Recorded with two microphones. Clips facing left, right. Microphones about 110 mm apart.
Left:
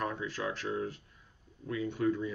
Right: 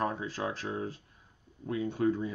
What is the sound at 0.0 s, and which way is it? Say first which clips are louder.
Speech: right 2 dB; 35° right (ahead or behind).